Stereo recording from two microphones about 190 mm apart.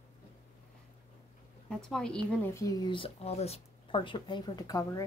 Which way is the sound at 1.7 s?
Centre (ahead or behind).